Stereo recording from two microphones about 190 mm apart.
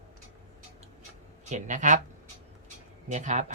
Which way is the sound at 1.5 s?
40° right (ahead or behind).